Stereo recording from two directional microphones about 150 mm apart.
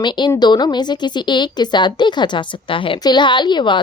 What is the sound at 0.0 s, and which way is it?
Speech, 30° left (ahead or behind).